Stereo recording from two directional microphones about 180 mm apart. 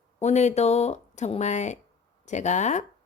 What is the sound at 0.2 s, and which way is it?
Speech, 40° left (ahead or behind).